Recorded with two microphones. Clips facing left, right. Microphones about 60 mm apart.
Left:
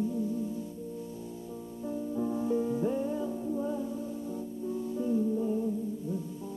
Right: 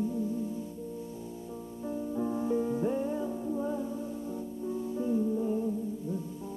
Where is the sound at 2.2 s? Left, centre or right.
Right.